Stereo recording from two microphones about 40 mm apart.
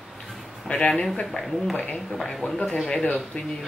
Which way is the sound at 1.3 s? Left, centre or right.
Centre.